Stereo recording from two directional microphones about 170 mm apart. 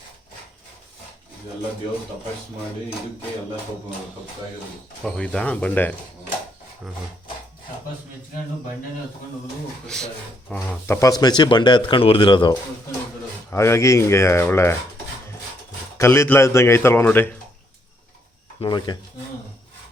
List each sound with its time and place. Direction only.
5.0 s speech: 5° left (ahead or behind)
9.8 s speech: 5° left (ahead or behind)
10.5 s speech: 15° left (ahead or behind)
13.5 s speech: 15° left (ahead or behind)
16.0 s speech: 15° left (ahead or behind)
18.6 s speech: 25° left (ahead or behind)